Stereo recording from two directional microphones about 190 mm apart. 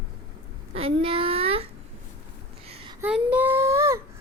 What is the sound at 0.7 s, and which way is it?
Child singing, 30° right (ahead or behind).